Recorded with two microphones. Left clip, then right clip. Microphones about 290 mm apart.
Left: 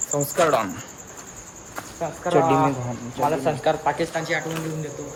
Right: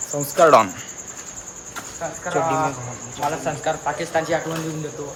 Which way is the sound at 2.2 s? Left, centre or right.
Left.